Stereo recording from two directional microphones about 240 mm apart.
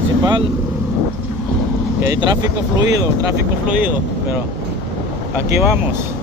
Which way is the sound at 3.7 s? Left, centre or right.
Centre.